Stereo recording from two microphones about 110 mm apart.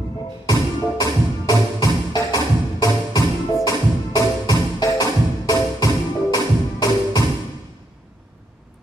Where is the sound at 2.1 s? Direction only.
35° left (ahead or behind).